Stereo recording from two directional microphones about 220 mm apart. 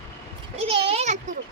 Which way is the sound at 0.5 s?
25° right (ahead or behind).